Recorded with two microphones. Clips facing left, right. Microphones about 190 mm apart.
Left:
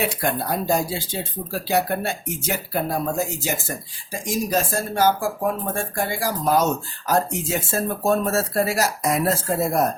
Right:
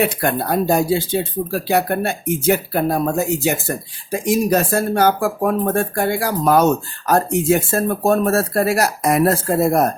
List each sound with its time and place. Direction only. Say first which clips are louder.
0.0 s speech: right 5 dB; 60° right (ahead or behind)